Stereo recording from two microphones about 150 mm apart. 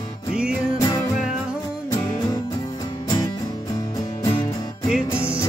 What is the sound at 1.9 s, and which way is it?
Music, 25° left (ahead or behind).